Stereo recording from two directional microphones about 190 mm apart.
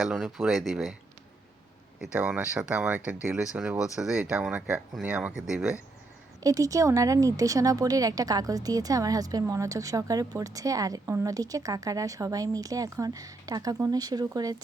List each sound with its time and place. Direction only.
0.0 s speech: centre (ahead or behind)
2.0 s speech: 5° right (ahead or behind)
6.4 s speech: 15° right (ahead or behind)